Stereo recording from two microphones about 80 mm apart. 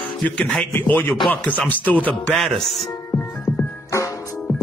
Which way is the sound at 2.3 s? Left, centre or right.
Centre.